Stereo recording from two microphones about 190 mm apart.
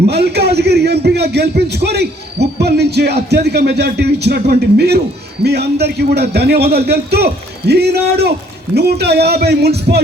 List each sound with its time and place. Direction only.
0.1 s a man's voice: 60° right (ahead or behind)